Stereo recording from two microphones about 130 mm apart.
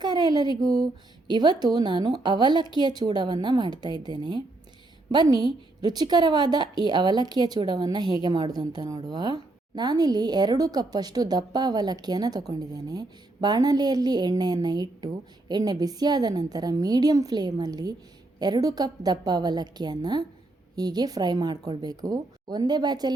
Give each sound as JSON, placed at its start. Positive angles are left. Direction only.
{"t": 0.0, "sound": "a woman's voice", "side_deg": -30}